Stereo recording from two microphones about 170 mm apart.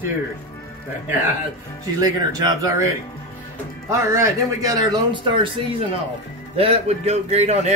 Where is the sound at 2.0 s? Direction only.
20° right (ahead or behind).